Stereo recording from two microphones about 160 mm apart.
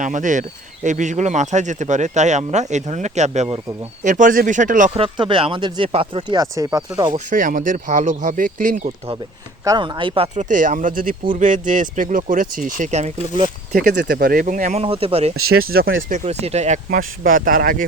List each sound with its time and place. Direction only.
0.0 s speech: 55° right (ahead or behind)
4.9 s speech: 30° right (ahead or behind)
7.3 s speech: 55° right (ahead or behind)
9.6 s speech: 25° right (ahead or behind)
10.3 s speech: 55° right (ahead or behind)
13.7 s speech: 80° right; by 15.3 s 40° right (ahead or behind)
15.4 s speech: 70° right (ahead or behind)